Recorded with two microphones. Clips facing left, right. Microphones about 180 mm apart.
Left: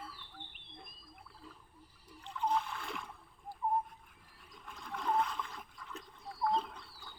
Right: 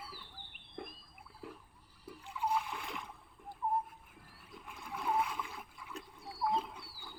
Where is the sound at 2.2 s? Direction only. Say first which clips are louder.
Left 1 dB; 10° right (ahead or behind).